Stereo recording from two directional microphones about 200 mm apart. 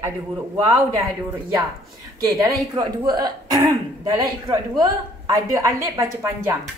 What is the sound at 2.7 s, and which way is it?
A woman's voice, 20° right (ahead or behind).